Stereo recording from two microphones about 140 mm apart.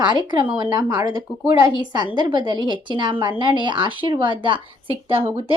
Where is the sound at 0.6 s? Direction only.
30° right (ahead or behind).